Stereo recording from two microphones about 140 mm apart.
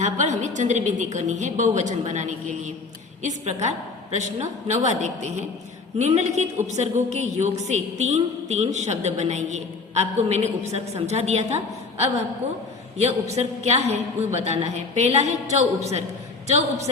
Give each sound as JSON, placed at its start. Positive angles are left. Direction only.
{"t": 0.0, "sound": "a woman's voice", "side_deg": -60}